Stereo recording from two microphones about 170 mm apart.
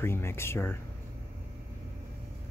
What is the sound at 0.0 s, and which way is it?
Speech, 15° left (ahead or behind).